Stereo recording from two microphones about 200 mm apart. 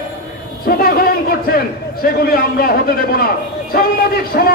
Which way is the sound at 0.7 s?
45° left (ahead or behind).